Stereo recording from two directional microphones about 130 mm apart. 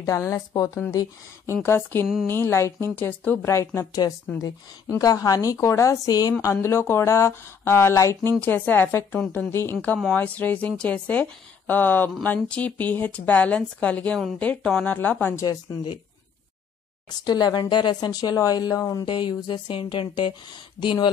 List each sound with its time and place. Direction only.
0.0 s a woman's voice: 25° left (ahead or behind)
15.4 s speech: 40° left (ahead or behind)
17.1 s speech: 30° left (ahead or behind)
19.0 s speech: 35° left (ahead or behind)